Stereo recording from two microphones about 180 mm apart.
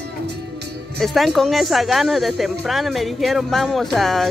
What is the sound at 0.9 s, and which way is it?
Speech, centre (ahead or behind).